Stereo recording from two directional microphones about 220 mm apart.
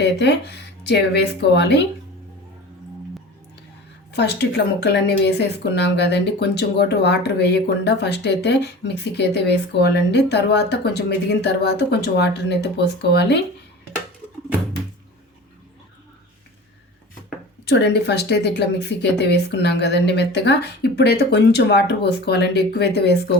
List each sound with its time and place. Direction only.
0.0 s speech: 50° left (ahead or behind)
4.1 s speech: 50° left (ahead or behind)
17.7 s speech: 50° left (ahead or behind)